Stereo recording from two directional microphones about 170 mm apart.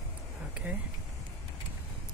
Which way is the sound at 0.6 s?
5° right (ahead or behind).